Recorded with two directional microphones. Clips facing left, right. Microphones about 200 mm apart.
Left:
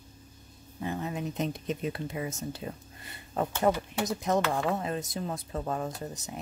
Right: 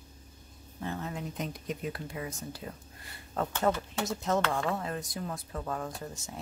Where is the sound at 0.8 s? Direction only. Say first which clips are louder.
Left 3 dB; 15° left (ahead or behind).